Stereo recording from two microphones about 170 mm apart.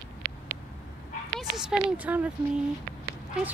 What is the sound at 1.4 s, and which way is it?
Speech, 5° right (ahead or behind).